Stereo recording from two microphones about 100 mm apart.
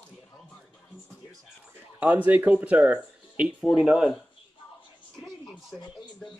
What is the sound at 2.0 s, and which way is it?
Speech, 15° right (ahead or behind).